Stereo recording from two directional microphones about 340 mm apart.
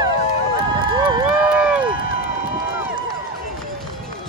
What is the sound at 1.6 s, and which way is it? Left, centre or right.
Run, centre.